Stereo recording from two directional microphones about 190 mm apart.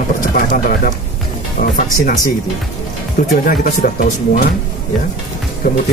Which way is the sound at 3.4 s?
45° left (ahead or behind).